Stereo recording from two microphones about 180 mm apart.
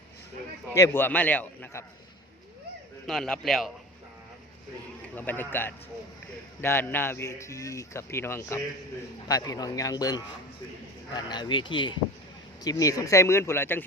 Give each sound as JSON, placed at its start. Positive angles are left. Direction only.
{"t": 0.7, "sound": "speech", "side_deg": 15}
{"t": 3.1, "sound": "a man's voice", "side_deg": 5}
{"t": 5.1, "sound": "a man's voice", "side_deg": 10}